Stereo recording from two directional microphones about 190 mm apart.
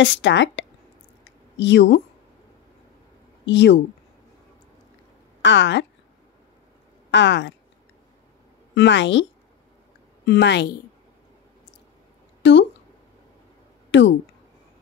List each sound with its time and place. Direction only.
0.0 s speech: 75° left (ahead or behind)
3.4 s speech: 70° left (ahead or behind)
5.4 s a woman's voice: 75° left (ahead or behind)
7.1 s speech: 70° left (ahead or behind)
8.7 s speech: 70° left (ahead or behind)
10.2 s a woman's voice: 65° left (ahead or behind)
13.8 s a sound: 70° left (ahead or behind)